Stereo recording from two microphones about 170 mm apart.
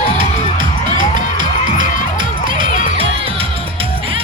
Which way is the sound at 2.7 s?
45° left (ahead or behind).